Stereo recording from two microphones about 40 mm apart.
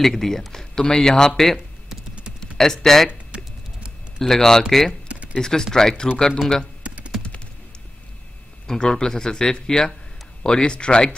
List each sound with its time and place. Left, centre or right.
0.0 s a man's voice: centre
3.1 s a sound: right
4.2 s a man's voice: centre
8.6 s a man's voice: centre